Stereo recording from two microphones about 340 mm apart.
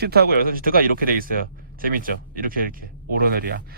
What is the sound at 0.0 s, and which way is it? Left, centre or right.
Speech, right.